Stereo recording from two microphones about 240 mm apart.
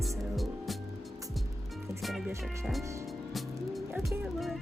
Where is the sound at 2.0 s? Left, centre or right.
Centre.